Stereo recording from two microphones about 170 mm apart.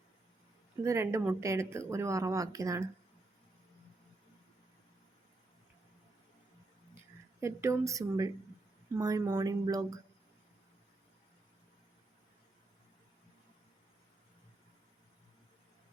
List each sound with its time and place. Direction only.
0.9 s speech: 15° right (ahead or behind)
7.4 s speech: 15° right (ahead or behind)